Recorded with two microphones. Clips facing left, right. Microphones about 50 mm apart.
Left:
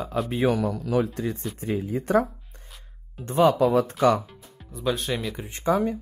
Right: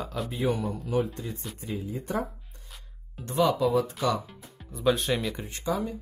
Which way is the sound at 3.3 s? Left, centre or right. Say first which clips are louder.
Left 5 dB; left.